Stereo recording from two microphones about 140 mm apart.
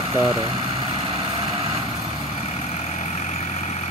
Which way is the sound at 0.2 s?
40° right (ahead or behind).